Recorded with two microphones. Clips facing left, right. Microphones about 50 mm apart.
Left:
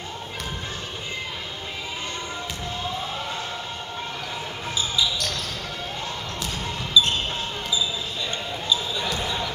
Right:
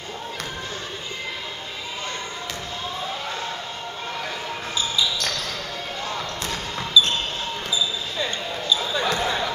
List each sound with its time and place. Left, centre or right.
7.0 s basketball bounce: centre
8.7 s basketball bounce: right